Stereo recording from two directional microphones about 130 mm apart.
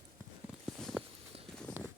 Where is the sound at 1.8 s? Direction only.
15° right (ahead or behind).